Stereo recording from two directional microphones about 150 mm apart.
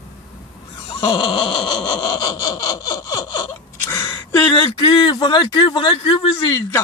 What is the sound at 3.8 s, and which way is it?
Gasp, 15° left (ahead or behind).